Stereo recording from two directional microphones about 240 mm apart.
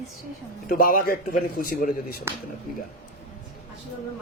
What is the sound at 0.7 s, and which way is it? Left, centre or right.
A man's voice, left.